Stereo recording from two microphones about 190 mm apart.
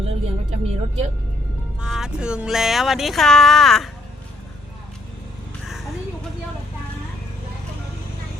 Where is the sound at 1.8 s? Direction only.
5° right (ahead or behind).